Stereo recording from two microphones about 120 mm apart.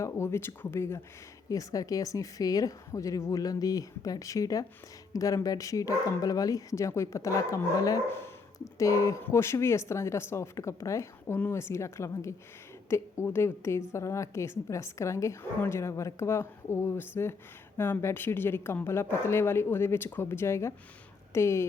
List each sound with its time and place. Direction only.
0.0 s speech: 20° left (ahead or behind)